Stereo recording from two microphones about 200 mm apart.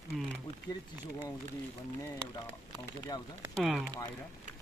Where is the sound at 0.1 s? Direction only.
Centre (ahead or behind).